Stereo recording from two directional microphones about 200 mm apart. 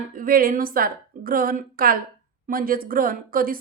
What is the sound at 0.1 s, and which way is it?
A woman's voice, 45° right (ahead or behind).